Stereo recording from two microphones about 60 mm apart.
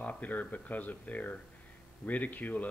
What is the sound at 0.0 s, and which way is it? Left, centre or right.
Speech, left.